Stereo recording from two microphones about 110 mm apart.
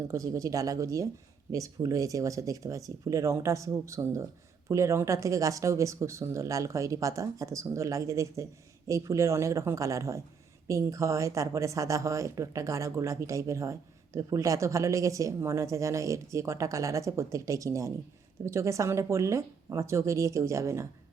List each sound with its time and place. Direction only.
0.1 s speech: 30° right (ahead or behind)